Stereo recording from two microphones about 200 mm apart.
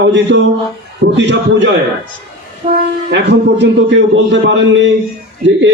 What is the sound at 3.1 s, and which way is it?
A man's voice, 60° right (ahead or behind).